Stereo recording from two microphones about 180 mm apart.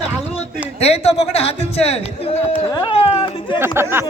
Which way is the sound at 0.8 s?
35° left (ahead or behind).